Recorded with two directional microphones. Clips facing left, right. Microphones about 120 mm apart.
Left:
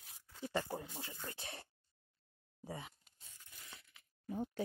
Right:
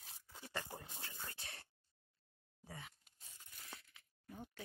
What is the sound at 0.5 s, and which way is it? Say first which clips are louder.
Speech: left 8 dB; 20° left (ahead or behind).